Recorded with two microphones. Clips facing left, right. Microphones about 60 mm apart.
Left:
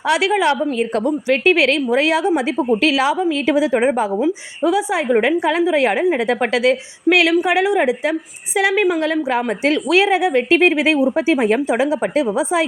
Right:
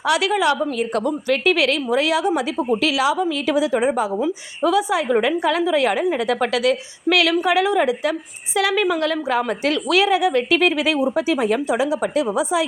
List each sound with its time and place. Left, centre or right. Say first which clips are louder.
0.0 s a woman's voice: left 2 dB; left
4.1 s a woman's voice: left 4 dB; left